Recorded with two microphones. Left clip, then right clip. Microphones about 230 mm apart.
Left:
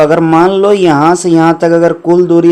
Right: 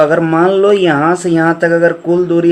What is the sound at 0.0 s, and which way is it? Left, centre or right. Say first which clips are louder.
Speech: left 3 dB; left.